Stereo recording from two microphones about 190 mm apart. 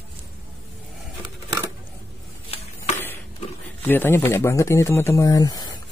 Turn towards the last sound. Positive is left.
turn(degrees=20)  # may be behind; listen again after turning